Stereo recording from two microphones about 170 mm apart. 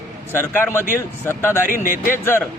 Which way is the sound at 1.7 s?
55° left (ahead or behind).